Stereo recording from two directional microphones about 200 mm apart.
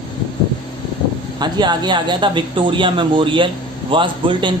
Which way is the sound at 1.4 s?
20° right (ahead or behind).